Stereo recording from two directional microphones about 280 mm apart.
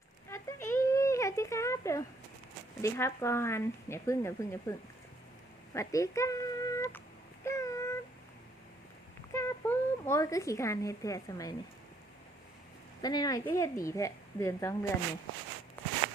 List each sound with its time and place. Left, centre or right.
0.3 s a sound: centre
2.8 s speech: centre
5.7 s speech: centre
7.4 s a sound: centre
9.3 s speech: centre
13.0 s speech: centre
15.8 s walk: centre